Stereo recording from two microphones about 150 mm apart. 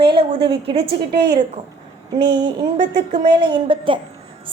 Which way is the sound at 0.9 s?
90° right.